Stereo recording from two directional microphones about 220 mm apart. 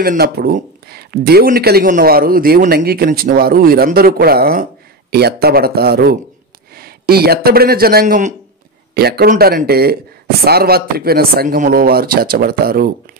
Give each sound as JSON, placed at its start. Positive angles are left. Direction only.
{"t": 0.0, "sound": "a man's voice", "side_deg": -45}